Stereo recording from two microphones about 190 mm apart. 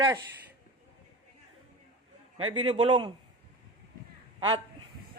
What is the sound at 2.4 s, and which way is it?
Speech, 25° right (ahead or behind).